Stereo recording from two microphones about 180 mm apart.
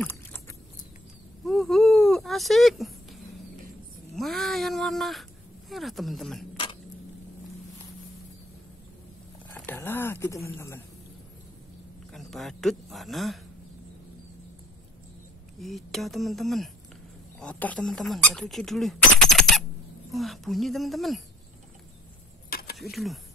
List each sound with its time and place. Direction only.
0.0 s a sound: 10° left (ahead or behind)
1.4 s a sound: centre (ahead or behind)
4.1 s speech: centre (ahead or behind)
9.5 s speech: 10° left (ahead or behind)
12.1 s speech: centre (ahead or behind)
15.6 s speech: centre (ahead or behind)
22.5 s mechanisms: 55° left (ahead or behind)
22.8 s speech: centre (ahead or behind)